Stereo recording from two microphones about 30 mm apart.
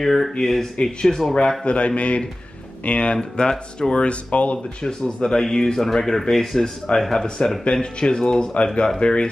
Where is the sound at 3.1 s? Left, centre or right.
Left.